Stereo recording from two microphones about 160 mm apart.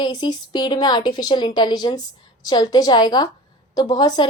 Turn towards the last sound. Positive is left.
turn(degrees=25)  # may be behind; listen again after turning